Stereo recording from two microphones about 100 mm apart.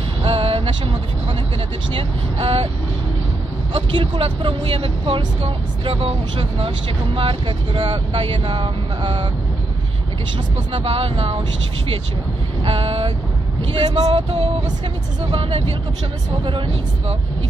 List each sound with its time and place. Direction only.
0.2 s music: 75° right (ahead or behind)
2.0 s speech: 70° right (ahead or behind)
3.7 s speech: 60° right (ahead or behind)
10.7 s speech: 75° right (ahead or behind)
12.6 s vehicle: 80° right
13.7 s speech: 90° right; by 14.5 s 75° right (ahead or behind)